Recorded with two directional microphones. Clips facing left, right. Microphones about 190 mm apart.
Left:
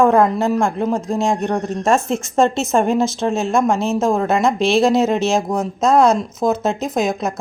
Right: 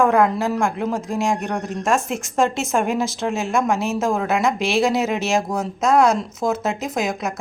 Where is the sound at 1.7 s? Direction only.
10° right (ahead or behind).